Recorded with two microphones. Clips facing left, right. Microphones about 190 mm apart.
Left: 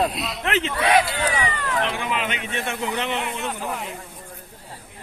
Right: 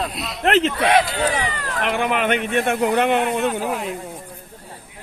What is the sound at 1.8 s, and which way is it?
A man's voice, 60° right (ahead or behind).